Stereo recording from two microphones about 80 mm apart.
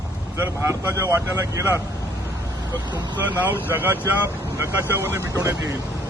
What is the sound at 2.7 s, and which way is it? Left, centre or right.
Speech, right.